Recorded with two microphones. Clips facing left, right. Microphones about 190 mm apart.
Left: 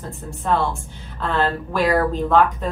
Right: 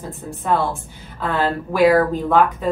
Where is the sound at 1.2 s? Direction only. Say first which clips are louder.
Right 1 dB; 15° right (ahead or behind).